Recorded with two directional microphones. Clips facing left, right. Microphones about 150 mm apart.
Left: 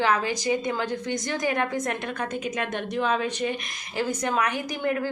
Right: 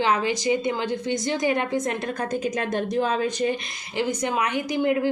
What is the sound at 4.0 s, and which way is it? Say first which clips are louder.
A woman's voice: right 1 dB; 20° right (ahead or behind).